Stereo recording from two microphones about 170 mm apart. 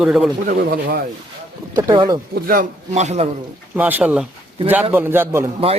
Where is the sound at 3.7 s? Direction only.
10° right (ahead or behind).